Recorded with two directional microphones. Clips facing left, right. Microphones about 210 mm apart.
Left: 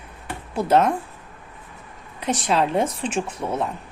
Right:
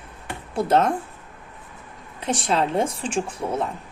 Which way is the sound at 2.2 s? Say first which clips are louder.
Left 1 dB; 25° right (ahead or behind).